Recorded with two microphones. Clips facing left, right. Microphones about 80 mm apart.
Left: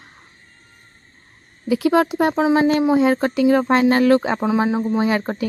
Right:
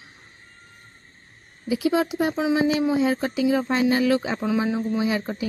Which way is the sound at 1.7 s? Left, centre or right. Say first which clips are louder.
Left 5 dB; left.